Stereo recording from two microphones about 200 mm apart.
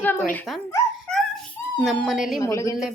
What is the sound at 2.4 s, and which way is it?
Speech, 15° left (ahead or behind).